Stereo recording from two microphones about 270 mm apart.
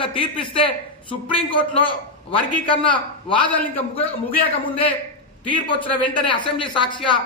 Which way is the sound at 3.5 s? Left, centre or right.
Centre.